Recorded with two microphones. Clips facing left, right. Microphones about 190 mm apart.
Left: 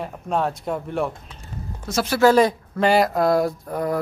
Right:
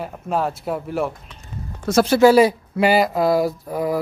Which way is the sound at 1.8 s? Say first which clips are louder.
Right 8 dB; 50° right (ahead or behind).